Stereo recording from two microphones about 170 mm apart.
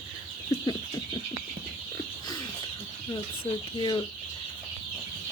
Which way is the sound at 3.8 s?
30° left (ahead or behind).